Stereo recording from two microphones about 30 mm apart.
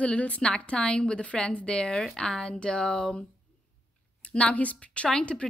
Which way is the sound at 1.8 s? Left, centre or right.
Left.